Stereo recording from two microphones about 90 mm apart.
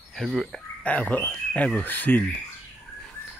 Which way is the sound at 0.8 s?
15° left (ahead or behind).